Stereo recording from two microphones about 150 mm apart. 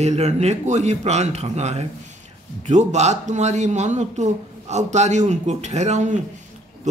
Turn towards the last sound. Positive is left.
turn(degrees=-50)  # may be behind; listen again after turning